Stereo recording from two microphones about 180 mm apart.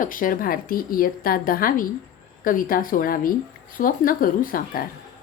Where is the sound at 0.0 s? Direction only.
50° left (ahead or behind).